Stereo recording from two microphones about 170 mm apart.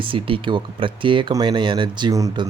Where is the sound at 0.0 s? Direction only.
30° right (ahead or behind).